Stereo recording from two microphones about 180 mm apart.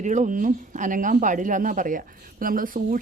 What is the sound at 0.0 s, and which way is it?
Speech, 40° right (ahead or behind).